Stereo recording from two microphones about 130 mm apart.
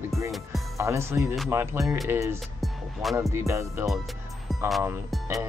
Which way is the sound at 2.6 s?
Centre (ahead or behind).